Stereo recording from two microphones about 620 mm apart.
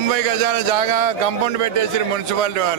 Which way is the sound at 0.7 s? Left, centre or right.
Right.